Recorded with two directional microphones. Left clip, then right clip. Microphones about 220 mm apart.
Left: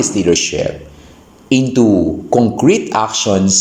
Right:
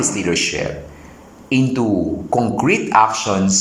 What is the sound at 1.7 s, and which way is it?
Speech, 25° left (ahead or behind).